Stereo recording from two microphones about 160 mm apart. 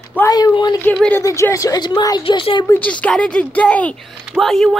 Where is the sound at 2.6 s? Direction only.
10° left (ahead or behind).